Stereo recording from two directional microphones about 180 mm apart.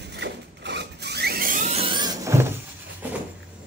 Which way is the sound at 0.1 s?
70° right (ahead or behind).